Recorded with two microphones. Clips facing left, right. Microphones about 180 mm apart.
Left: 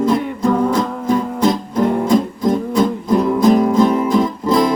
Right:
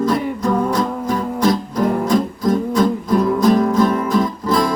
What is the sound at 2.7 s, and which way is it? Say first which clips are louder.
Music: left 1 dB; 20° left (ahead or behind).